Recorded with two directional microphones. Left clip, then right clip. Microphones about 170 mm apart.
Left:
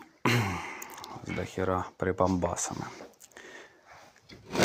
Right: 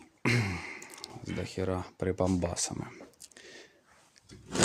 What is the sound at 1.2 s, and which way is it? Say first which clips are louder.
Speech: left 3 dB; 15° right (ahead or behind).